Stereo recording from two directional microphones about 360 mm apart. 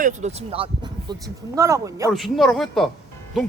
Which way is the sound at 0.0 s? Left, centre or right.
Centre.